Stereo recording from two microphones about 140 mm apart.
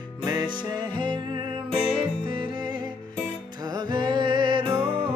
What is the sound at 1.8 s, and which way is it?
Music, 35° right (ahead or behind).